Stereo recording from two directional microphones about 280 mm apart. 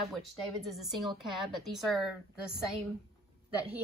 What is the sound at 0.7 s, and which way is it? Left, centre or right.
Speech, centre.